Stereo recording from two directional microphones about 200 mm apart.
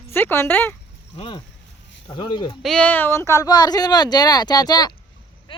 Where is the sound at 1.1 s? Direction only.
30° left (ahead or behind).